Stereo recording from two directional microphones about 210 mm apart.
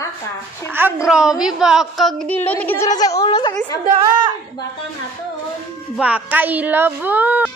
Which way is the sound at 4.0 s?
20° right (ahead or behind).